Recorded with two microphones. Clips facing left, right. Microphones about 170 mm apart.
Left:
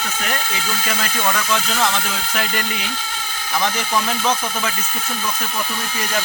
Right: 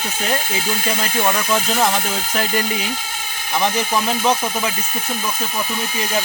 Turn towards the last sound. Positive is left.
turn(degrees=-15)  # may be behind; listen again after turning